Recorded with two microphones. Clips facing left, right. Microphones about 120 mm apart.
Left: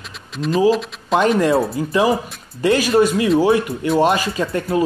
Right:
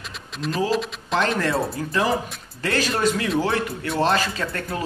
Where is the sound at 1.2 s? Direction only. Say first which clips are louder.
Left 7 dB; 15° left (ahead or behind).